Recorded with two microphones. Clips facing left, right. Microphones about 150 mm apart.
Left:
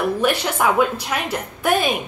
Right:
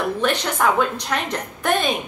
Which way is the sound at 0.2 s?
10° left (ahead or behind).